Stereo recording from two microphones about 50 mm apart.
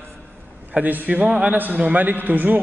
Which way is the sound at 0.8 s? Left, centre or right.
Right.